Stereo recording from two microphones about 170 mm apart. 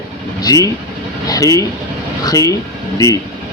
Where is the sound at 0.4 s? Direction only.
20° left (ahead or behind).